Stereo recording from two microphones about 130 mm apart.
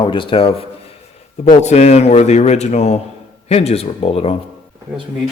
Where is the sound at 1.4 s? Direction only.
60° left (ahead or behind).